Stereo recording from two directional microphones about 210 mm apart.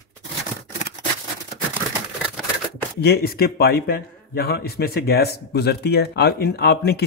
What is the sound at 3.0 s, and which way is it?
A man's voice, 45° left (ahead or behind).